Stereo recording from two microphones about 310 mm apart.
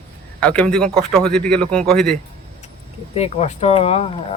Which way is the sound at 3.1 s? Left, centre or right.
Centre.